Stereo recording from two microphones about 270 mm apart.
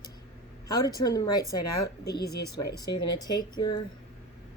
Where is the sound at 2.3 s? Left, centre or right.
Left.